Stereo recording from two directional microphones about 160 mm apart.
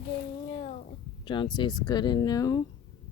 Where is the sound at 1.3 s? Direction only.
30° left (ahead or behind).